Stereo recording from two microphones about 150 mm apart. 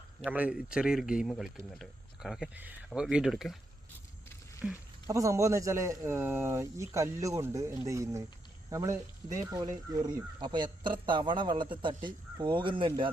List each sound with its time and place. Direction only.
0.3 s speech: 10° right (ahead or behind)
4.6 s speech: 5° right (ahead or behind)
5.0 s a man's voice: 20° right (ahead or behind)